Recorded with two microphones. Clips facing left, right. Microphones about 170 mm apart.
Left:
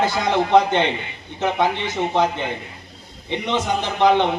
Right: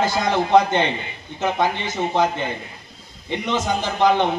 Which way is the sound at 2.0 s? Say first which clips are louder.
Even; 5° right (ahead or behind).